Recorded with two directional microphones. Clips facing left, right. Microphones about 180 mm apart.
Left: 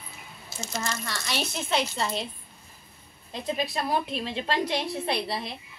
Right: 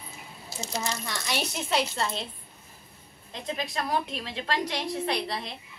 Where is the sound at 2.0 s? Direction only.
5° left (ahead or behind).